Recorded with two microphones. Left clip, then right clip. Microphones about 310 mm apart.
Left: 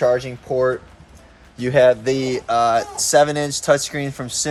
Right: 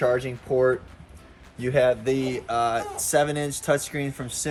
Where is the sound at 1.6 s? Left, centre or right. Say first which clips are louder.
Left 7 dB; left.